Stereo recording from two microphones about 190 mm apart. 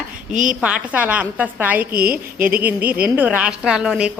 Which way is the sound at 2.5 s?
10° right (ahead or behind).